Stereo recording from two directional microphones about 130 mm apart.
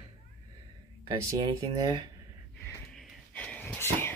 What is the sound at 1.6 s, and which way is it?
Speech, 35° right (ahead or behind).